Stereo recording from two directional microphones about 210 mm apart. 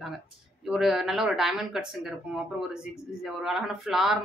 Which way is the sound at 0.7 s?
Centre (ahead or behind).